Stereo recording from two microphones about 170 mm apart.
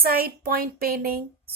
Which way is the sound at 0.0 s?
60° right (ahead or behind).